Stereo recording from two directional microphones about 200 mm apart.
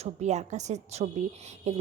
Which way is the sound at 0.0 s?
35° right (ahead or behind).